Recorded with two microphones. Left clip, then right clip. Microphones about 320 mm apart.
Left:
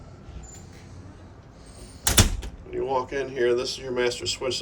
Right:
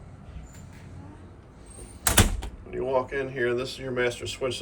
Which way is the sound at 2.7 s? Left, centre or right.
Centre.